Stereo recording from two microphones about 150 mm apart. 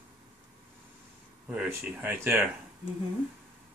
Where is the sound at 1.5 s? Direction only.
10° right (ahead or behind).